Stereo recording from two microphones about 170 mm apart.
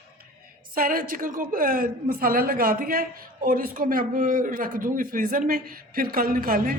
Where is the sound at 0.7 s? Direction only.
55° right (ahead or behind).